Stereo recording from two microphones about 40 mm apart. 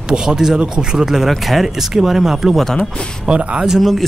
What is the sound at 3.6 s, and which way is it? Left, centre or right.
Speech, centre.